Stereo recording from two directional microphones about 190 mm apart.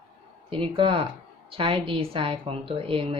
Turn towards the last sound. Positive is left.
turn(degrees=-30)  # may be behind; listen again after turning